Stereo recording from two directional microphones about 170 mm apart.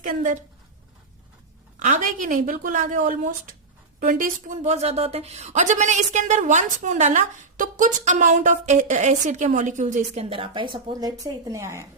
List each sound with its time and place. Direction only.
0.0 s a woman's voice: 50° right (ahead or behind)
1.8 s a woman's voice: 50° right (ahead or behind); by 11.9 s 15° right (ahead or behind)